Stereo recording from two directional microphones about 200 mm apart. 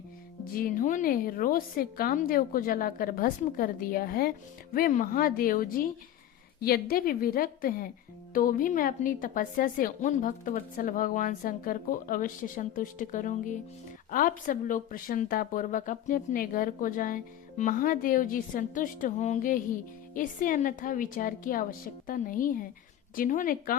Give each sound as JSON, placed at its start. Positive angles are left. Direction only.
{"t": 0.5, "sound": "a woman's voice", "side_deg": 45}